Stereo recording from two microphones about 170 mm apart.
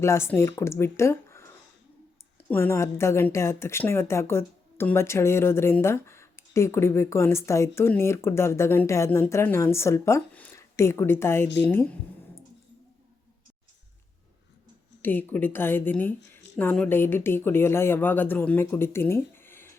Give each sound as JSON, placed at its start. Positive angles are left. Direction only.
{"t": 0.0, "sound": "speech", "side_deg": 15}
{"t": 2.5, "sound": "speech", "side_deg": 15}
{"t": 15.0, "sound": "speech", "side_deg": 10}